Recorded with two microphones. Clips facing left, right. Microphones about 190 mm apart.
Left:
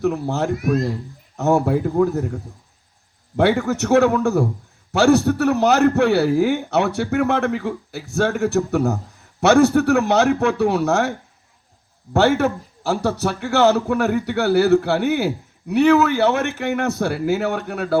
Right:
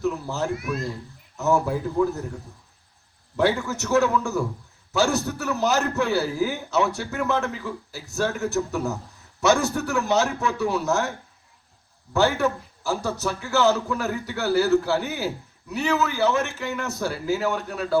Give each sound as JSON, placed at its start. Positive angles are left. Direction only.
{"t": 0.0, "sound": "a man's voice", "side_deg": 60}
{"t": 0.5, "sound": "speech", "side_deg": 40}
{"t": 1.4, "sound": "a man's voice", "side_deg": 60}
{"t": 12.1, "sound": "a man's voice", "side_deg": 60}